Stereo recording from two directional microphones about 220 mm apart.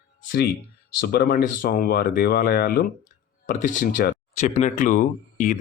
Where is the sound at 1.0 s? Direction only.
45° left (ahead or behind).